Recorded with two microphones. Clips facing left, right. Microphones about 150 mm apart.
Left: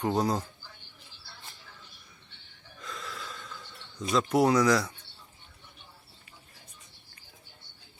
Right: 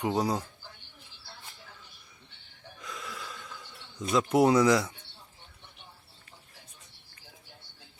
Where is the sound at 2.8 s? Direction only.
10° right (ahead or behind).